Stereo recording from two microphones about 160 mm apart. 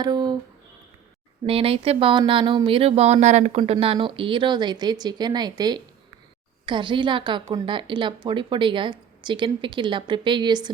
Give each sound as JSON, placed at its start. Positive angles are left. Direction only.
{"t": 0.0, "sound": "speech", "side_deg": -25}
{"t": 1.5, "sound": "speech", "side_deg": -35}